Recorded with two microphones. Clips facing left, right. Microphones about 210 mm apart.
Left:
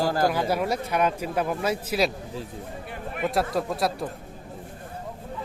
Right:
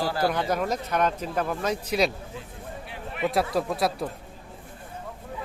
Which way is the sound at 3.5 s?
Centre (ahead or behind).